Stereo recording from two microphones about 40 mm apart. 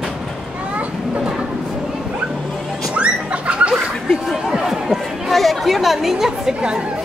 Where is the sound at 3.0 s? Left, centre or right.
Right.